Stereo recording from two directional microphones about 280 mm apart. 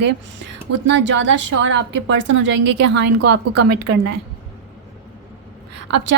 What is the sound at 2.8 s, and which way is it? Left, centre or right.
A woman's voice, right.